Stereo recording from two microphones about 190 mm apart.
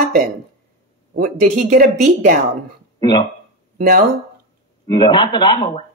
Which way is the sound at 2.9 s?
20° left (ahead or behind).